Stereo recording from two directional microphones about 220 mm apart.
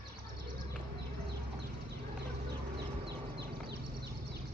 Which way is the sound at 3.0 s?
50° right (ahead or behind).